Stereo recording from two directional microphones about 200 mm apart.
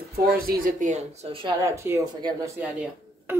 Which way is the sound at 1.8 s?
15° right (ahead or behind).